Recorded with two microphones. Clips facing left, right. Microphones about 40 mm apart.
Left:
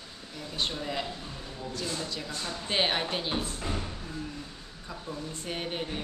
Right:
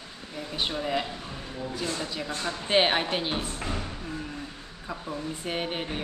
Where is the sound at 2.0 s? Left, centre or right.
Centre.